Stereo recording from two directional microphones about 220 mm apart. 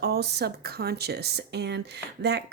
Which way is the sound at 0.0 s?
45° right (ahead or behind).